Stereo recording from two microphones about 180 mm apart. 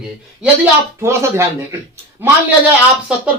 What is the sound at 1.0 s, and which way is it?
Speech, 15° right (ahead or behind).